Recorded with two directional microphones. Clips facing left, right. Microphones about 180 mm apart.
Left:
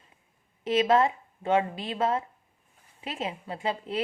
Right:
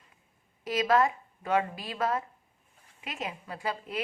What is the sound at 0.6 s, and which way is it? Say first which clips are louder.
A woman's voice: left 3 dB; 25° left (ahead or behind).